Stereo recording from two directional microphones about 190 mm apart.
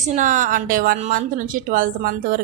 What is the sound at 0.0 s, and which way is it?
Speech, 40° right (ahead or behind).